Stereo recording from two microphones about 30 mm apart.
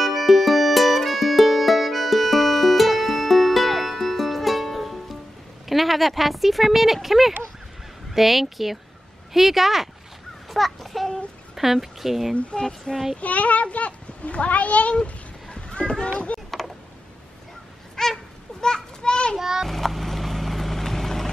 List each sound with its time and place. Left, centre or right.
0.0 s music: centre
5.7 s speech: centre
12.4 s speech: left
12.6 s speech: left
13.2 s a child's voice: left
15.5 s cat: left
17.9 s a sound: centre
18.6 s children playing: left
19.3 s speech: centre
19.7 s vehicle: centre